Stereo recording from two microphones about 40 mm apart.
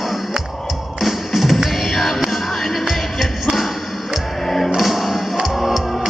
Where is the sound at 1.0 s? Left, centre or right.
Centre.